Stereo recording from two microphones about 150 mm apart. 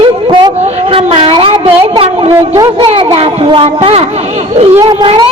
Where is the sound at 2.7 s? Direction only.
35° right (ahead or behind).